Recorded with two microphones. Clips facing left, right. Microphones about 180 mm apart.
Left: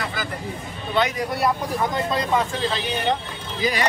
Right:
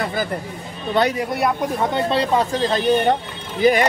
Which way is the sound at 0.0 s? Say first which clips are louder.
Right 6 dB; 55° right (ahead or behind).